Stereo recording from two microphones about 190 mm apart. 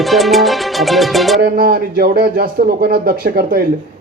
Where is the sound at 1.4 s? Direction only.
50° right (ahead or behind).